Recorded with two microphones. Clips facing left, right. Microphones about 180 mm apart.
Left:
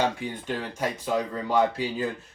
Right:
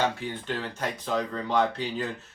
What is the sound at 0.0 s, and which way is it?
Speech, 10° left (ahead or behind).